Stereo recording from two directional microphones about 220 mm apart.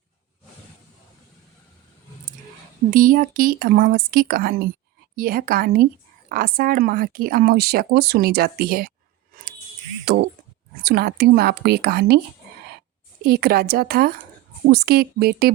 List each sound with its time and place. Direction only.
2.9 s a woman's voice: 40° right (ahead or behind)
9.3 s a sound: 35° right (ahead or behind)
10.1 s speech: 45° right (ahead or behind)
13.2 s speech: 45° right (ahead or behind)